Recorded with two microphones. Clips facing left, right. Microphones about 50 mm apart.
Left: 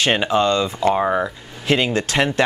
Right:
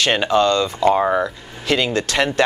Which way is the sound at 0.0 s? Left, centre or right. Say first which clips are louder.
Right 1 dB; centre.